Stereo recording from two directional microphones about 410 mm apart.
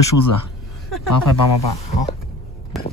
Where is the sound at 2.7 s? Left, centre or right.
Centre.